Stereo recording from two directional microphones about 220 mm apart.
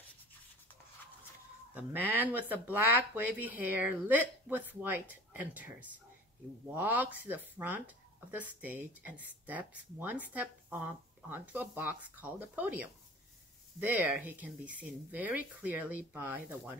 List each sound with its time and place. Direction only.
1.7 s speech: 5° right (ahead or behind)